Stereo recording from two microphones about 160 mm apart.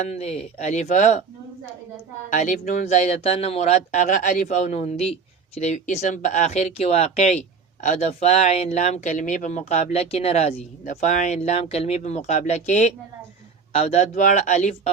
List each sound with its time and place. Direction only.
0.0 s speech: 45° left (ahead or behind)
2.3 s speech: 50° left (ahead or behind)